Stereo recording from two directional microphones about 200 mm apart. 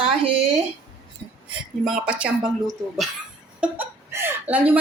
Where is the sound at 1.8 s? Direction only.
5° right (ahead or behind).